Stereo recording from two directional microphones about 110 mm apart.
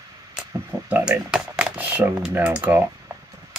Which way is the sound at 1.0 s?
5° right (ahead or behind).